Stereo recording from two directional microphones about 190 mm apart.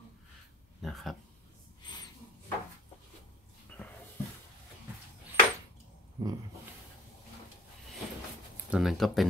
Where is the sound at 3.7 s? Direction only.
5° left (ahead or behind).